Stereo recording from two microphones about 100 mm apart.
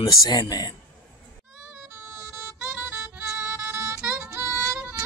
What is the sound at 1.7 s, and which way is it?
Music, 20° right (ahead or behind).